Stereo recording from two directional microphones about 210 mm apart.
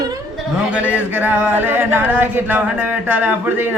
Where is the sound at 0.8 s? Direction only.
10° right (ahead or behind).